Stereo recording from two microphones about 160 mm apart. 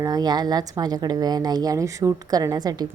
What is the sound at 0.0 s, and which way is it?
A woman's voice, 25° right (ahead or behind).